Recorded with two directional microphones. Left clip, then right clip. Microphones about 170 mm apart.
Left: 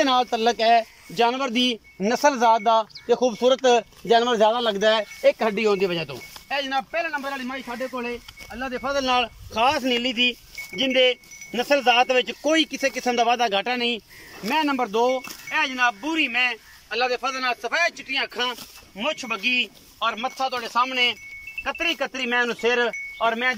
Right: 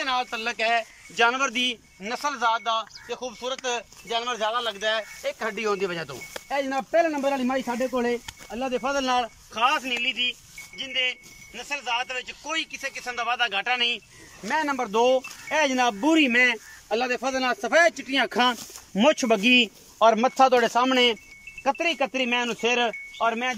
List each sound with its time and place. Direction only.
0.0 s speech: 35° left (ahead or behind); by 6.1 s 15° left (ahead or behind)
7.1 s speech: 20° right (ahead or behind)
7.4 s speech: 35° right (ahead or behind)
8.5 s speech: 20° right (ahead or behind)
9.0 s speech: centre (ahead or behind)
9.5 s speech: 25° left (ahead or behind)
10.8 s speech: 50° left (ahead or behind); by 14.0 s 25° left (ahead or behind)
14.5 s speech: 5° left (ahead or behind)
15.5 s a man's voice: 40° right (ahead or behind)
21.6 s speech: 25° right (ahead or behind)